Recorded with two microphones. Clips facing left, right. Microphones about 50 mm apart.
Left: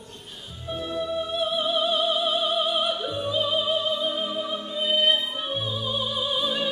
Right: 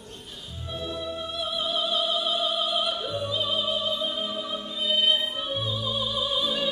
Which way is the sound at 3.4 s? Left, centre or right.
Centre.